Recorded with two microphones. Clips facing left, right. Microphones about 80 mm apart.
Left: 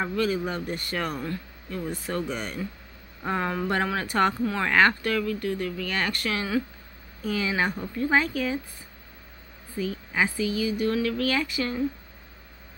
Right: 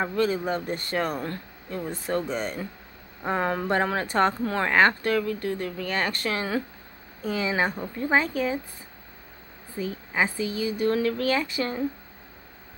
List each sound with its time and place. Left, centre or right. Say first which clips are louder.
0.0 s speech: right 1 dB; right
9.8 s speech: even; right